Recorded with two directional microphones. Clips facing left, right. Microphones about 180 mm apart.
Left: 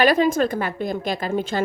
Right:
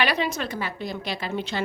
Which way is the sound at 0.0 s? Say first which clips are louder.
Left 8 dB; 45° left (ahead or behind).